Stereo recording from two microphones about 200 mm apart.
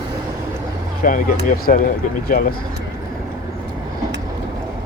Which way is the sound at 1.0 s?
40° left (ahead or behind).